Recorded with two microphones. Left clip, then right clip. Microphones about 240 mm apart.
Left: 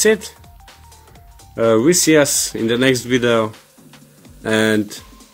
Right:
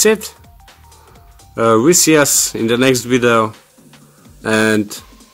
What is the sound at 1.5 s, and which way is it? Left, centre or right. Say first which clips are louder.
Speech: right 2 dB; centre.